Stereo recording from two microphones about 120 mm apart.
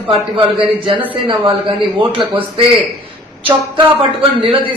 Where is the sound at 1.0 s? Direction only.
50° right (ahead or behind).